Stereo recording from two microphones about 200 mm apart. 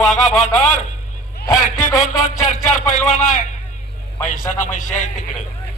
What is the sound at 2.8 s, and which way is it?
Speech, 35° left (ahead or behind).